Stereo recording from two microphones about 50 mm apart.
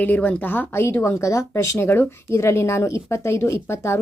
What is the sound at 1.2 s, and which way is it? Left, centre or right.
Speech, left.